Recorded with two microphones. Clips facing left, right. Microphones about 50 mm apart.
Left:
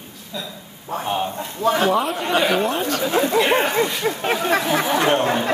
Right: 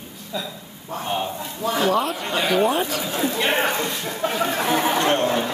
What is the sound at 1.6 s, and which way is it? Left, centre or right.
Speech, left.